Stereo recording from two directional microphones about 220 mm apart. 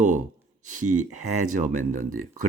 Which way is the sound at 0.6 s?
35° right (ahead or behind).